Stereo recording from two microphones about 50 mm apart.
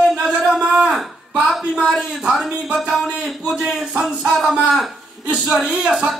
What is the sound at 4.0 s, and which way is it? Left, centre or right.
Speech, centre.